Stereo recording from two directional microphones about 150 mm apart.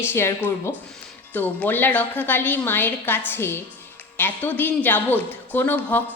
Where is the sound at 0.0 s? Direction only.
15° left (ahead or behind).